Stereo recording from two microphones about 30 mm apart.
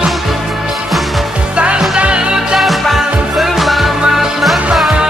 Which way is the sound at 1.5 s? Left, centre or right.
Right.